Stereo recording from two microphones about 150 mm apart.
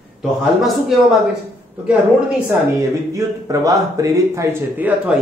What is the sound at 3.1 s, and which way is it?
Speech, 20° right (ahead or behind).